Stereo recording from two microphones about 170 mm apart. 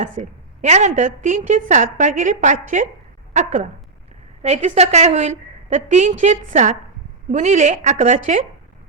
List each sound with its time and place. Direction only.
0.0 s a woman's voice: 45° right (ahead or behind)